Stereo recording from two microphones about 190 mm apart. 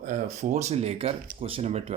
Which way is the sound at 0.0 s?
40° right (ahead or behind).